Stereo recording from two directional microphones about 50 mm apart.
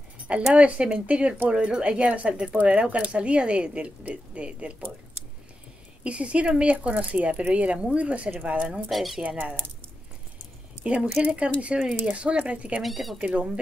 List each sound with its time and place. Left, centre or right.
0.3 s speech: right
6.0 s speech: right
8.9 s speech: centre
10.8 s speech: right
12.8 s speech: centre
13.2 s speech: right